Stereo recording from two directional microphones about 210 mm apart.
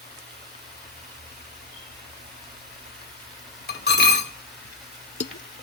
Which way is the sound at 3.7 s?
50° left (ahead or behind).